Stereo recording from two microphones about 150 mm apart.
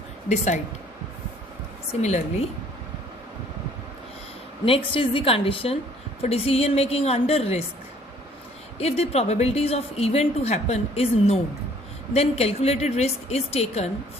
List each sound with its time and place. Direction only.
0.3 s a woman's voice: 50° left (ahead or behind)
1.9 s a woman's voice: 50° left (ahead or behind)
4.9 s a woman's voice: 35° left (ahead or behind)
8.8 s a woman's voice: 45° left (ahead or behind)